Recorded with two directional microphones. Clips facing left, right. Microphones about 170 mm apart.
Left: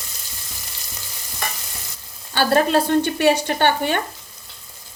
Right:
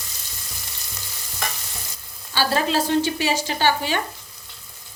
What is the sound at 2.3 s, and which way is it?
Speech, 55° left (ahead or behind).